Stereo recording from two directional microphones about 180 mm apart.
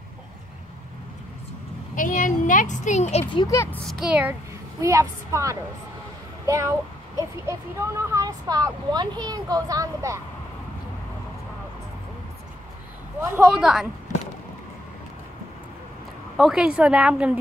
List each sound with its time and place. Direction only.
2.0 s a sound: 50° left (ahead or behind)
3.5 s speech: 10° left (ahead or behind)
4.0 s a woman's voice: 10° right (ahead or behind)
13.2 s speech: 5° right (ahead or behind)
16.3 s a woman's voice: 5° right (ahead or behind)